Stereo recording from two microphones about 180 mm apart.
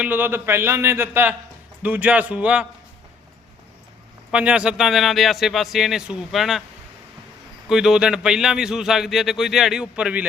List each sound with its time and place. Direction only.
0.0 s a man's voice: 10° right (ahead or behind)
4.3 s speech: 5° right (ahead or behind)
7.7 s speech: 5° right (ahead or behind)